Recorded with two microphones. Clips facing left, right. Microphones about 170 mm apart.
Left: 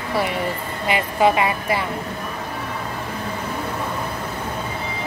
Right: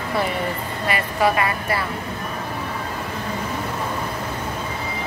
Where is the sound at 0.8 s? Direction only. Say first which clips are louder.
Left 3 dB; 20° left (ahead or behind).